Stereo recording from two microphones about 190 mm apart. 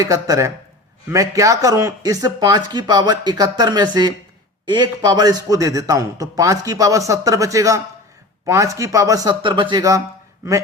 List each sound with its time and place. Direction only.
0.0 s a man's voice: 15° right (ahead or behind)